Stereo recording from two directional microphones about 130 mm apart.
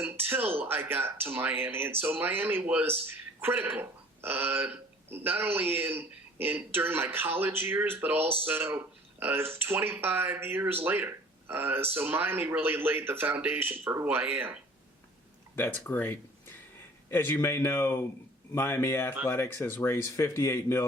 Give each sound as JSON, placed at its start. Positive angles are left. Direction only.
{"t": 0.0, "sound": "speech", "side_deg": -15}
{"t": 15.5, "sound": "speech", "side_deg": 15}